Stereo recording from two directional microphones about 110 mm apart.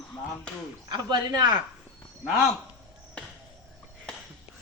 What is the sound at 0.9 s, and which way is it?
Speech, 40° right (ahead or behind).